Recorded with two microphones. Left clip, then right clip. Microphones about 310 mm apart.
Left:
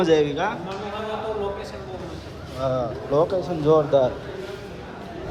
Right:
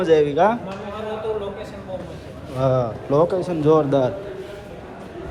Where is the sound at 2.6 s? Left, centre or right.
Right.